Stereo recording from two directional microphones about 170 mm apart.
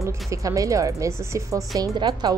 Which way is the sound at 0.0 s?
20° right (ahead or behind).